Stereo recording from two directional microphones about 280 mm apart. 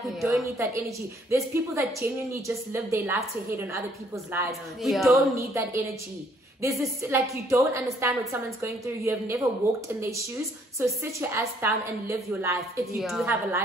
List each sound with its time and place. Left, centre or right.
0.0 s a woman's voice: centre
6.8 s a woman's voice: centre